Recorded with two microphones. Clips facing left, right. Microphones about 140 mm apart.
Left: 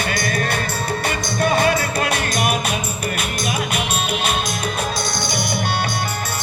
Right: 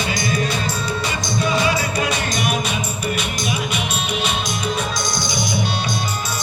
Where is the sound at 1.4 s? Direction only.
55° left (ahead or behind).